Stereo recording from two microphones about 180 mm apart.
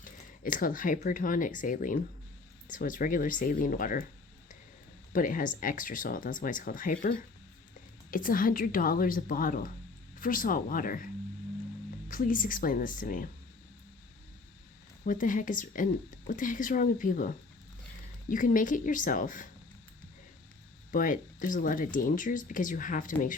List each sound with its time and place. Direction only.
0.0 s speech: 50° left (ahead or behind)
5.1 s speech: 50° left (ahead or behind)
15.0 s speech: 50° left (ahead or behind)
20.9 s speech: 50° left (ahead or behind)